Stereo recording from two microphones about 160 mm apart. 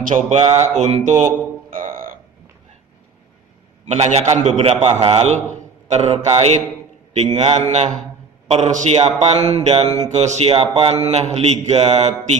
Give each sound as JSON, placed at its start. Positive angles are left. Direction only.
{"t": 0.0, "sound": "speech", "side_deg": -50}
{"t": 3.8, "sound": "speech", "side_deg": -45}